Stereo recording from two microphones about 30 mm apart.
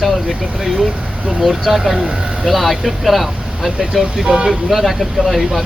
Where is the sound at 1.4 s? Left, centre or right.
Centre.